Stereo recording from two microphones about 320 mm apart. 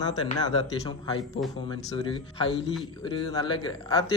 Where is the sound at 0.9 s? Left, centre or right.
Centre.